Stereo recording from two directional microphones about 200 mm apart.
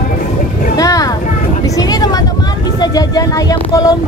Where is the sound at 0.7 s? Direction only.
15° left (ahead or behind).